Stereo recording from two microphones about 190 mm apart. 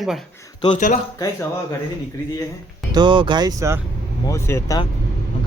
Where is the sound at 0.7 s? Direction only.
45° left (ahead or behind).